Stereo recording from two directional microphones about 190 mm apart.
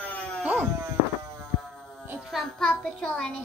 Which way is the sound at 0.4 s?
10° right (ahead or behind).